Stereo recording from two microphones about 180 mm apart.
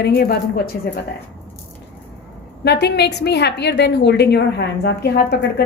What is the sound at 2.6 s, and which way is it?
A woman's voice, 70° left (ahead or behind).